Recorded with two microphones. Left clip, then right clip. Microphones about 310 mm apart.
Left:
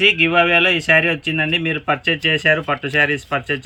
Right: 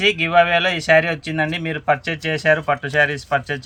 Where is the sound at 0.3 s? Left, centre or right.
Centre.